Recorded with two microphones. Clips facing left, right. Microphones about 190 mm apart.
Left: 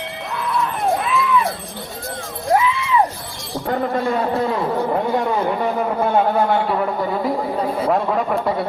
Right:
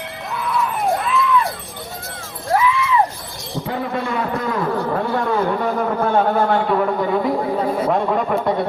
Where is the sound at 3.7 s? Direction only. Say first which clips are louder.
Left 4 dB; 45° left (ahead or behind).